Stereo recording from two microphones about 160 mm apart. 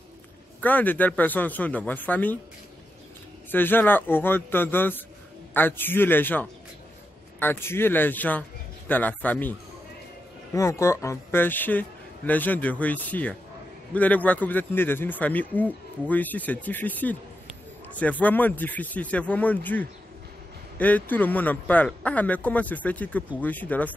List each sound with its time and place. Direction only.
0.6 s a man's voice: 10° left (ahead or behind)
3.5 s a man's voice: 10° left (ahead or behind)
10.5 s a man's voice: 20° left (ahead or behind)
18.2 s a man's voice: 10° left (ahead or behind)